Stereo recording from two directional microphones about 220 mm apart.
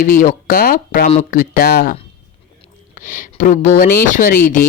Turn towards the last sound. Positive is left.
turn(degrees=35)  # may be behind; listen again after turning